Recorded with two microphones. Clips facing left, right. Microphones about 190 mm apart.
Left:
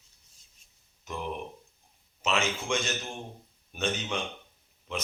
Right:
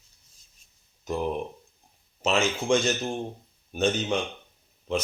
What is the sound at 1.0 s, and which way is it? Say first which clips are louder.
A man's voice: right 7 dB; 35° right (ahead or behind).